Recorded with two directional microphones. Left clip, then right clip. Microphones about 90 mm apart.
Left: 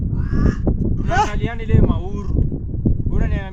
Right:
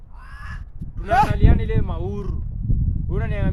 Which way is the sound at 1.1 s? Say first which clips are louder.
Right 1 dB; 25° right (ahead or behind).